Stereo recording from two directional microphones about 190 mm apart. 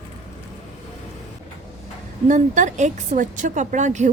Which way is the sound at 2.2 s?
40° right (ahead or behind).